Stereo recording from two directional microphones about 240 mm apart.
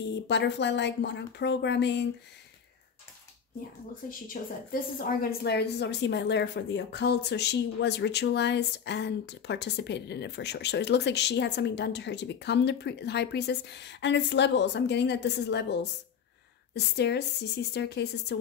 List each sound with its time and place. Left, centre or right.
0.3 s a woman's voice: left
4.1 s a woman's voice: left